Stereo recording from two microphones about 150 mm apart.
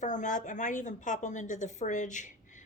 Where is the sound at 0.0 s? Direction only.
55° left (ahead or behind).